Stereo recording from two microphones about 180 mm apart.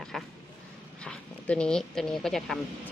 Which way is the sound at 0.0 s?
Centre (ahead or behind).